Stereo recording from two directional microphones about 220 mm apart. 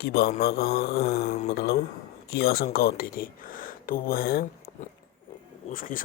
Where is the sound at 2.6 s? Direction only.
45° left (ahead or behind).